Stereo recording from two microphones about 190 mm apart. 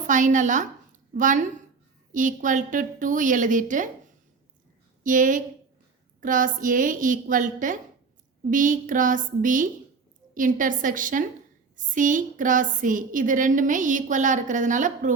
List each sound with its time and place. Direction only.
0.1 s a woman's voice: 40° right (ahead or behind)
5.0 s a woman's voice: 45° right (ahead or behind)